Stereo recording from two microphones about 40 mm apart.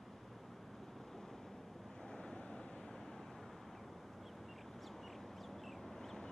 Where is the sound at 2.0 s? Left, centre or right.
Centre.